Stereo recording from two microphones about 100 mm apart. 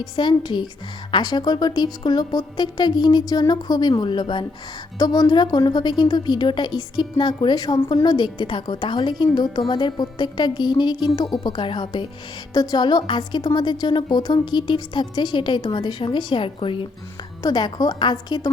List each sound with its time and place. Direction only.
0.0 s a woman's voice: 50° left (ahead or behind)
17.4 s a woman's voice: 45° left (ahead or behind)